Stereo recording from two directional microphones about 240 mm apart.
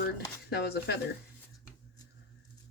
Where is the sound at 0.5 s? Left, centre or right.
Left.